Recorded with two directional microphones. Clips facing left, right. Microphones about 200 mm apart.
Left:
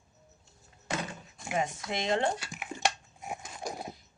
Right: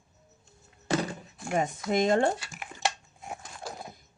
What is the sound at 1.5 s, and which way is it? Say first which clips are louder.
Speech: right 6 dB; 50° right (ahead or behind).